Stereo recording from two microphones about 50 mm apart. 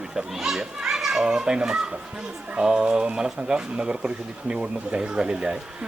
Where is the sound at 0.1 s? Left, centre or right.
Centre.